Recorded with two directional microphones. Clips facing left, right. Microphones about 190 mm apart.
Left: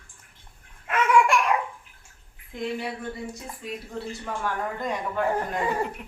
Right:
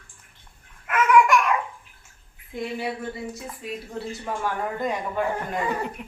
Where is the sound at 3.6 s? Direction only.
Centre (ahead or behind).